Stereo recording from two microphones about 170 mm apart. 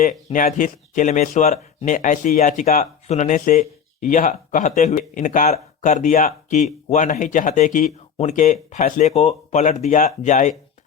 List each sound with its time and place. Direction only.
0.3 s speech: 50° left (ahead or behind)